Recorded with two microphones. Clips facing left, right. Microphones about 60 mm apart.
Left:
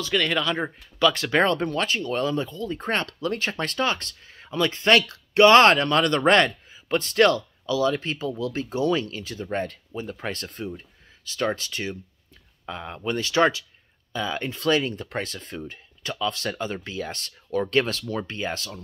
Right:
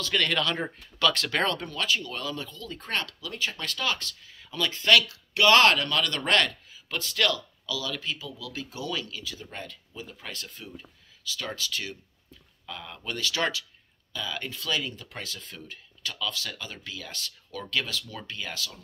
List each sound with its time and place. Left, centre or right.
0.1 s speech: centre; by 14.7 s left
14.7 s speech: left